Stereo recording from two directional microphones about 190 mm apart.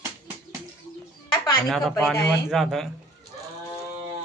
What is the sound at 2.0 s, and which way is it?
Speech, centre (ahead or behind).